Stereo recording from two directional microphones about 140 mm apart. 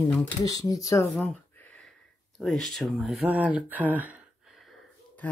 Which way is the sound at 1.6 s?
10° left (ahead or behind).